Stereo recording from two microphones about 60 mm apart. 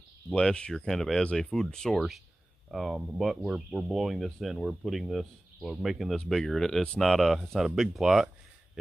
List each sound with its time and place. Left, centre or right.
0.3 s speech: centre
2.7 s speech: centre